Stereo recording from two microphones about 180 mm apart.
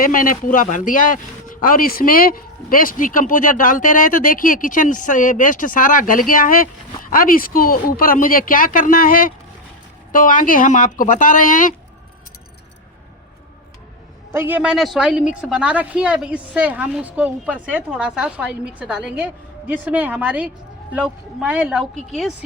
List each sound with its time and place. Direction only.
0.0 s speech: 50° left (ahead or behind)
14.3 s speech: 10° right (ahead or behind)